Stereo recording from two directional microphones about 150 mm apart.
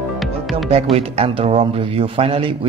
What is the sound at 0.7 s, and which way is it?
A man's voice, 40° right (ahead or behind).